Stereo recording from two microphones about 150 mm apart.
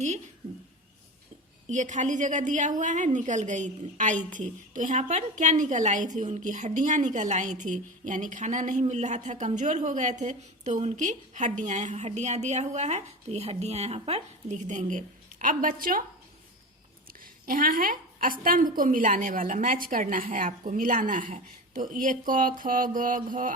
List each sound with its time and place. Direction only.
1.6 s a woman's voice: 55° right (ahead or behind); by 16.0 s 70° right (ahead or behind)
17.1 s a woman's voice: 75° right (ahead or behind)